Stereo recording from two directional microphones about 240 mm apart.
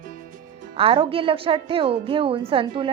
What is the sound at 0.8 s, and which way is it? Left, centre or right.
A woman's voice, right.